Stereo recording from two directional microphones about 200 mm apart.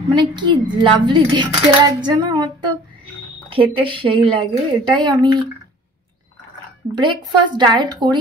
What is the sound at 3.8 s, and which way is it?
A woman's voice, 25° right (ahead or behind).